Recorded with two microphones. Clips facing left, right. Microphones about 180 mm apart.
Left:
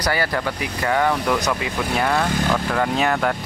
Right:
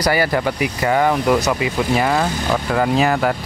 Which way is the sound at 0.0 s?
10° right (ahead or behind).